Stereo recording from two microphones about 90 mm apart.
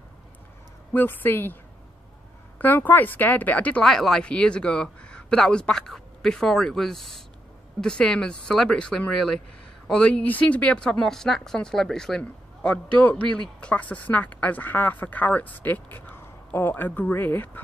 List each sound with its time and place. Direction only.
0.9 s speech: 20° left (ahead or behind)
2.6 s speech: 20° left (ahead or behind)
3.8 s speech: 5° left (ahead or behind); by 17.5 s 25° left (ahead or behind)